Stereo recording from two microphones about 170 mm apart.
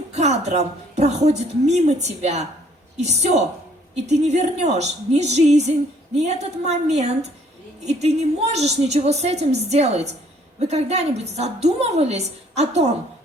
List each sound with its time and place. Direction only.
0.1 s a woman's voice: 40° right (ahead or behind)